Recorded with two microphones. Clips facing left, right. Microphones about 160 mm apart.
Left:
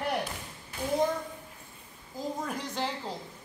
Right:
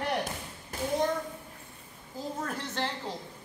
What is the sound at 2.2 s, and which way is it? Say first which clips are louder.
Speech: left 1 dB; 10° left (ahead or behind).